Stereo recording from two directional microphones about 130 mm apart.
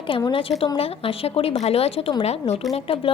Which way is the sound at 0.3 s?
45° left (ahead or behind).